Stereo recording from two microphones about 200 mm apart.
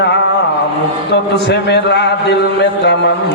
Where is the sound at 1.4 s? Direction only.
55° left (ahead or behind).